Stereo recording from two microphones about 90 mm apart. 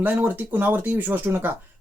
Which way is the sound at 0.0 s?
20° right (ahead or behind).